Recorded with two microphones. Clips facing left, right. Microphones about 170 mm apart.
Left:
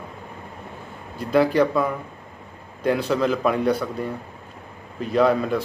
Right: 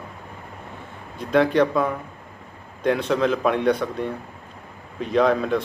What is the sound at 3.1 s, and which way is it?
A man's voice, 5° left (ahead or behind).